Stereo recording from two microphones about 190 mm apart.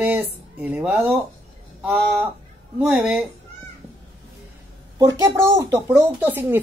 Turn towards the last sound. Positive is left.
turn(degrees=-10)  # may be behind; listen again after turning